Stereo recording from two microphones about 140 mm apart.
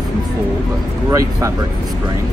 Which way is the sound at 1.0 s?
20° right (ahead or behind).